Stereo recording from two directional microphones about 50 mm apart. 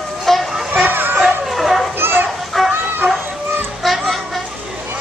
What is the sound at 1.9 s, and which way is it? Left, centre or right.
Children playing, right.